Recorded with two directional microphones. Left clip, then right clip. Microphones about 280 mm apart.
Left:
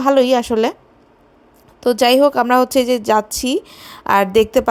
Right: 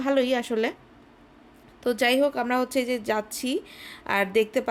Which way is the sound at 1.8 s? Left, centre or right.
Centre.